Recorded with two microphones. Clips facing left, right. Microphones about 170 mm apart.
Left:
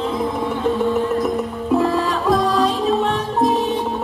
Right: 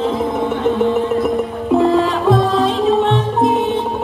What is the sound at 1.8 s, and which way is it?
Music, 20° right (ahead or behind).